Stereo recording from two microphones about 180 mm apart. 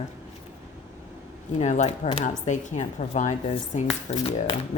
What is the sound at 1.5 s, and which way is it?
Speech, 40° left (ahead or behind).